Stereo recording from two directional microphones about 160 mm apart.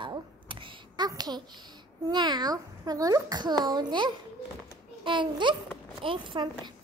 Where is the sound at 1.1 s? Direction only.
25° right (ahead or behind).